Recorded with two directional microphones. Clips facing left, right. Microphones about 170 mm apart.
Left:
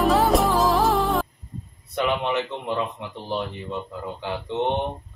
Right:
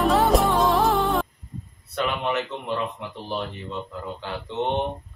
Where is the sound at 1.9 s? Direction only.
20° left (ahead or behind).